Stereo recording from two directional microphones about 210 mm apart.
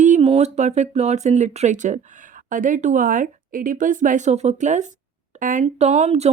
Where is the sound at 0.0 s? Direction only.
30° right (ahead or behind).